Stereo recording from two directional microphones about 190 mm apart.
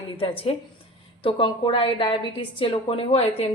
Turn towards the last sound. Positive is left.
turn(degrees=30)  # may be behind; listen again after turning